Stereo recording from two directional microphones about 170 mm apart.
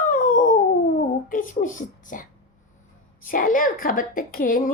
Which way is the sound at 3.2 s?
55° left (ahead or behind).